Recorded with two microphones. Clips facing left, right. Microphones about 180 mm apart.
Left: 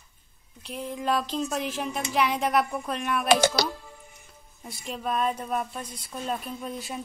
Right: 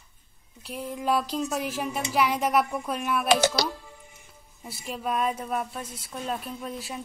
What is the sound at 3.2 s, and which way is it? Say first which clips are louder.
Speech: left 1 dB; 50° left (ahead or behind).